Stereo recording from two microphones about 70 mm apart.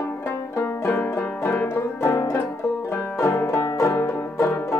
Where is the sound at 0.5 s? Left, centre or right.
Left.